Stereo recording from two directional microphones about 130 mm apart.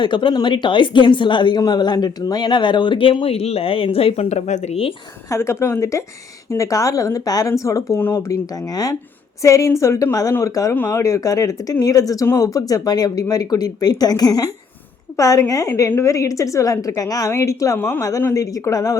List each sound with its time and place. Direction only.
0.0 s speech: 35° left (ahead or behind)
5.3 s speech: 20° left (ahead or behind)